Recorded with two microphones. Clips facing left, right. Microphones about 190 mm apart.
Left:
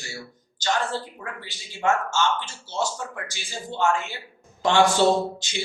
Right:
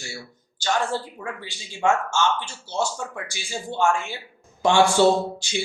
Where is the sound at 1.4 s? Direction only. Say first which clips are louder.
Right 2 dB; 15° right (ahead or behind).